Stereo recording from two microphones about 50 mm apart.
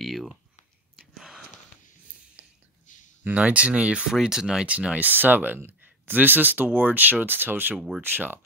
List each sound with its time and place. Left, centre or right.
0.0 s a sound: centre
0.9 s wheeze: centre
2.4 s whispering: right
3.3 s speech: right
4.1 s speech: centre
4.6 s speech: right
5.1 s speech: right